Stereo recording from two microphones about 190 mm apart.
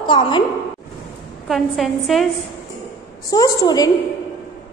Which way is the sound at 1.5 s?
Centre (ahead or behind).